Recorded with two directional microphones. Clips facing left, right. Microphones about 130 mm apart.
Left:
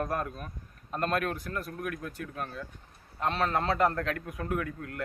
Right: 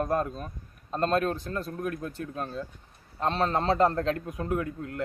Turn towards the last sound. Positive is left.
turn(degrees=-25)  # may be behind; listen again after turning